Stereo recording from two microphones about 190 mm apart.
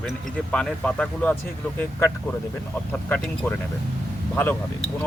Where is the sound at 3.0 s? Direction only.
5° left (ahead or behind).